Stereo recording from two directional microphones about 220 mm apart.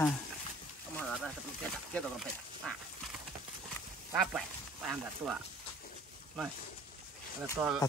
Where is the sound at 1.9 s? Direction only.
Centre (ahead or behind).